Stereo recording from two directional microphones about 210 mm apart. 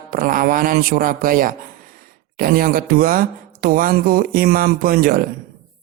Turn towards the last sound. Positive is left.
turn(degrees=-45)  # may be behind; listen again after turning